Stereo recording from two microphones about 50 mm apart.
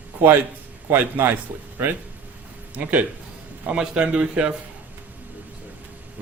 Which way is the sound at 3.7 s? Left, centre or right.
Right.